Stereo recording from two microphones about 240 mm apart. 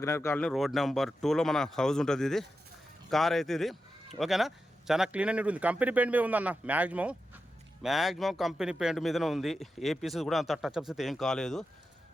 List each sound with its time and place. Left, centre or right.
0.0 s speech: centre